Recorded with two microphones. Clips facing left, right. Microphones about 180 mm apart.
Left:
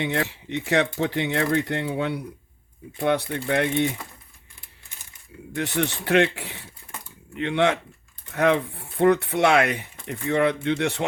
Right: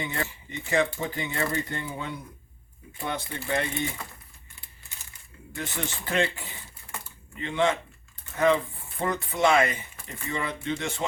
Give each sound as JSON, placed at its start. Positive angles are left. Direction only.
{"t": 0.0, "sound": "speech", "side_deg": 75}
{"t": 5.5, "sound": "speech", "side_deg": 70}